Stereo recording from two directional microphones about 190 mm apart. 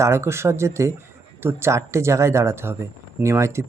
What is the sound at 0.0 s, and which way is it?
Speech, 15° right (ahead or behind).